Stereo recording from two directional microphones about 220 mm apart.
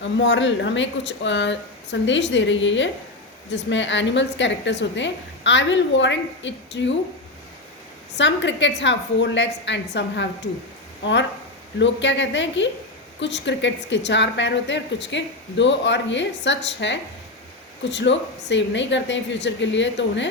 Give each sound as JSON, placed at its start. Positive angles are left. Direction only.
{"t": 0.0, "sound": "a woman's voice", "side_deg": 55}
{"t": 8.1, "sound": "a woman's voice", "side_deg": 55}